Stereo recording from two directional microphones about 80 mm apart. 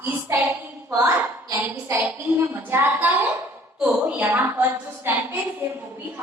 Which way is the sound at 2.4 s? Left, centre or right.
Right.